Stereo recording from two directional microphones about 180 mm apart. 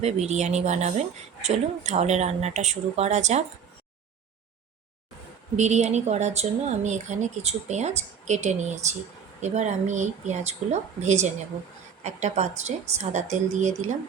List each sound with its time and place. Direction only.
0.0 s speech: 40° right (ahead or behind)
5.5 s speech: 40° right (ahead or behind)